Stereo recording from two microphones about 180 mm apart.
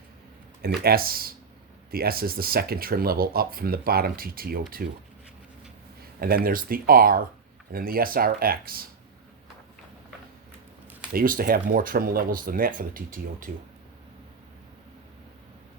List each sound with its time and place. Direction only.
0.8 s speech: 55° right (ahead or behind)
6.1 s speech: 55° right (ahead or behind)
11.1 s speech: 55° right (ahead or behind)